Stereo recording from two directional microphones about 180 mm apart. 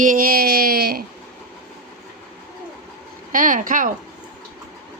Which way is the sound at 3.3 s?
50° right (ahead or behind).